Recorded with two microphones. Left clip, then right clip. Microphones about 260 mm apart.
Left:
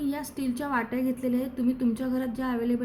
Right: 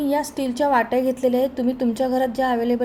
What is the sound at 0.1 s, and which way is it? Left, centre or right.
A woman's voice, centre.